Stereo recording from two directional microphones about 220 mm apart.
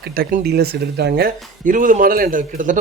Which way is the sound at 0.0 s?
45° right (ahead or behind).